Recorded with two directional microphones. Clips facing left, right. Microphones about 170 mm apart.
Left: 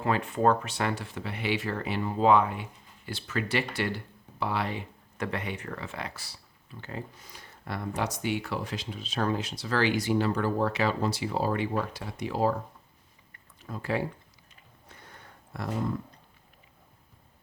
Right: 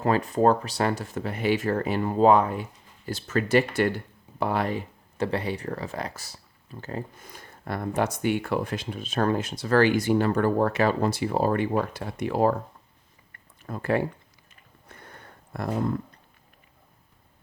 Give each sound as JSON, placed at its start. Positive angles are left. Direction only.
{"t": 0.0, "sound": "speech", "side_deg": -40}
{"t": 5.1, "sound": "speech", "side_deg": -30}
{"t": 13.6, "sound": "speech", "side_deg": -55}
{"t": 14.8, "sound": "a sound", "side_deg": -55}